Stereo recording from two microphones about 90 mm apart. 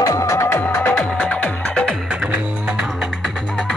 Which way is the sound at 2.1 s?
10° right (ahead or behind).